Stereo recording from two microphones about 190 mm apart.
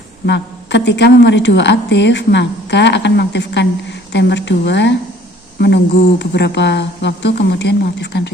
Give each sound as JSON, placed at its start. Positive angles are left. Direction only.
{"t": 0.3, "sound": "a woman's voice", "side_deg": 65}